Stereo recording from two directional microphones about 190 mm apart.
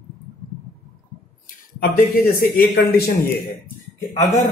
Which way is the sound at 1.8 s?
55° left (ahead or behind).